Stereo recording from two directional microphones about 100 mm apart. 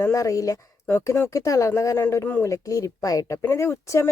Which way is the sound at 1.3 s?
30° left (ahead or behind).